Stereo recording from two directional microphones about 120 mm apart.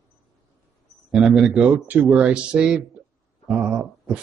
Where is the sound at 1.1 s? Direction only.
5° right (ahead or behind).